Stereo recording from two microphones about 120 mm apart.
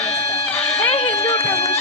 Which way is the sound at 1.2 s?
65° left (ahead or behind).